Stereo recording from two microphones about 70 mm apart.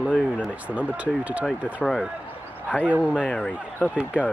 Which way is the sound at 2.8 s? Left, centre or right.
Centre.